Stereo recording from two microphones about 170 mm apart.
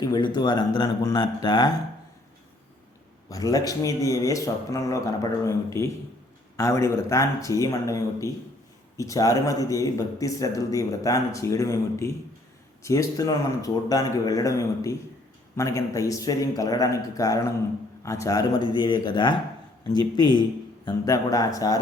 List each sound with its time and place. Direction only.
0.0 s speech: 25° left (ahead or behind)
3.2 s speech: 20° left (ahead or behind)